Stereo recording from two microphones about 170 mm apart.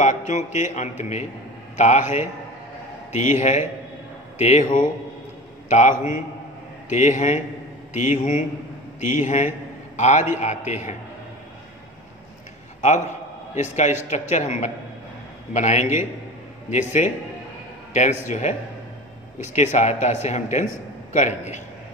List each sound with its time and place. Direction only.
0.0 s a man's voice: 45° left (ahead or behind)
5.7 s a man's voice: 45° left (ahead or behind)
12.8 s a man's voice: 45° left (ahead or behind)
19.5 s a man's voice: 40° left (ahead or behind)